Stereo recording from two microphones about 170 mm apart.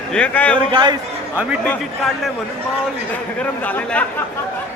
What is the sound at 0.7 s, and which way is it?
Speech, 25° right (ahead or behind).